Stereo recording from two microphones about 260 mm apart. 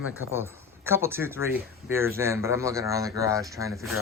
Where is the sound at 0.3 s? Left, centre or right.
Centre.